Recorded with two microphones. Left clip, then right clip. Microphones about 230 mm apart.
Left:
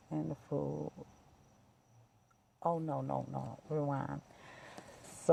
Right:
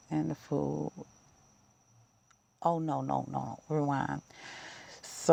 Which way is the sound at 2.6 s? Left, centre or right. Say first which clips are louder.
Right 5 dB; right.